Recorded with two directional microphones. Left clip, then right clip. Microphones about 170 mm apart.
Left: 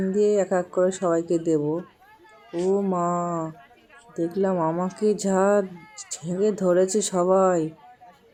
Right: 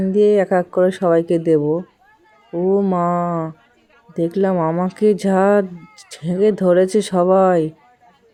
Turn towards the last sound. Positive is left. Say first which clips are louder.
# right 6 dB
turn(degrees=-35)  # may be behind; listen again after turning